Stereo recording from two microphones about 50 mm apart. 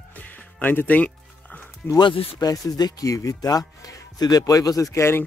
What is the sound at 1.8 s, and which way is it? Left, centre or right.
Speech, left.